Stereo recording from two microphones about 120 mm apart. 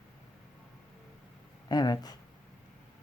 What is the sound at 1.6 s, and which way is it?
Speech, 35° left (ahead or behind).